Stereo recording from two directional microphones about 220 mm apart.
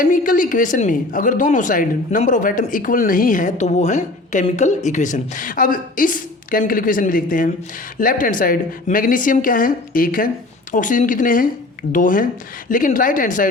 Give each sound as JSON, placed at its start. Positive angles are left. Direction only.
{"t": 0.0, "sound": "speech", "side_deg": 35}